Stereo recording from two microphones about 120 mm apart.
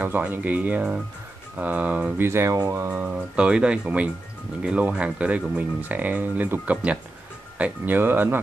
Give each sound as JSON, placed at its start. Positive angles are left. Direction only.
{"t": 0.0, "sound": "speech", "side_deg": -15}